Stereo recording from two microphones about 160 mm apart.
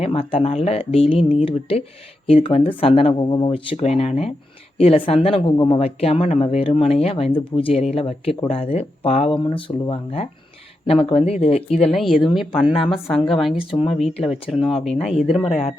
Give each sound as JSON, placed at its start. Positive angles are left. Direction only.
{"t": 0.0, "sound": "speech", "side_deg": 35}
{"t": 11.9, "sound": "speech", "side_deg": 0}
{"t": 12.5, "sound": "speech", "side_deg": 35}
{"t": 12.8, "sound": "speech", "side_deg": 0}
{"t": 13.7, "sound": "speech", "side_deg": 35}
{"t": 14.8, "sound": "speech", "side_deg": 0}